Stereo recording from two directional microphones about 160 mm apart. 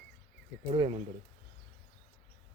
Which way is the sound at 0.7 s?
35° right (ahead or behind).